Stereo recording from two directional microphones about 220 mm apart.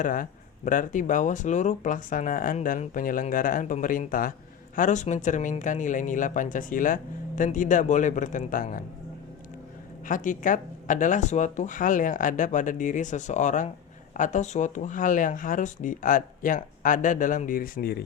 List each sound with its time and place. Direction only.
0.0 s speech: 40° left (ahead or behind)
10.1 s speech: 35° left (ahead or behind)